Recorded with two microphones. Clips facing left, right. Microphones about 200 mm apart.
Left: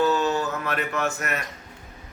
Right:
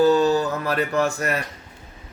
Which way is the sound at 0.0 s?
35° right (ahead or behind).